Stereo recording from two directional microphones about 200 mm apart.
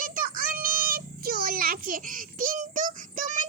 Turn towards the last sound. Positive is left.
turn(degrees=-40)  # may be behind; listen again after turning